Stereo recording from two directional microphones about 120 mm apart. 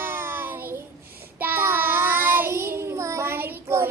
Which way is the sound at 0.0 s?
20° right (ahead or behind).